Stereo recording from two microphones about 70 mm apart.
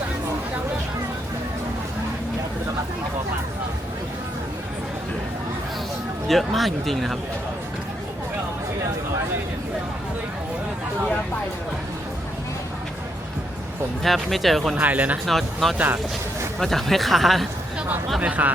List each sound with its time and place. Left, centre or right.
6.2 s speech: centre
14.0 s speech: centre
14.8 s speech: right
15.3 s speech: centre
18.2 s speech: right